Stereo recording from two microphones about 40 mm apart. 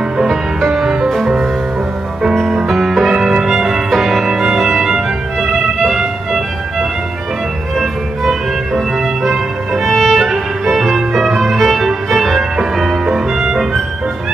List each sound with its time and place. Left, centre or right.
0.2 s music: centre
2.5 s music: centre
3.2 s music: centre
4.6 s violin: centre
7.8 s music: centre
10.1 s music: centre